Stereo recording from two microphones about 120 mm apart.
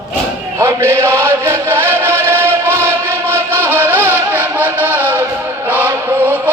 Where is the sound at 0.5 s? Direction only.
20° right (ahead or behind).